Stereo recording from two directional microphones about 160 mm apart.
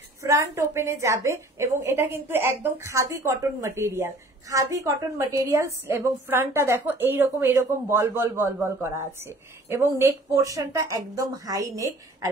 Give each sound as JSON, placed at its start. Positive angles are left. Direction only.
{"t": 0.2, "sound": "a woman's voice", "side_deg": -20}